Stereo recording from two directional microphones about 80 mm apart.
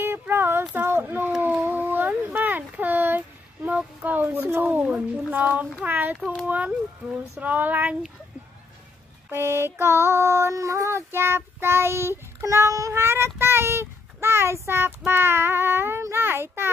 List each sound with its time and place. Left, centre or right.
0.0 s a sound: right
5.9 s speech: right
9.3 s mantra: right